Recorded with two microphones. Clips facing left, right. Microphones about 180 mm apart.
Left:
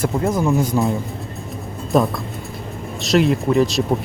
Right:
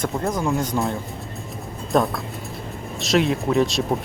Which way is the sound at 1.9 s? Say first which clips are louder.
Left 3 dB; centre (ahead or behind).